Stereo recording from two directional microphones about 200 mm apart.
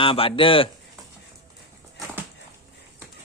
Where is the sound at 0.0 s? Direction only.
25° left (ahead or behind).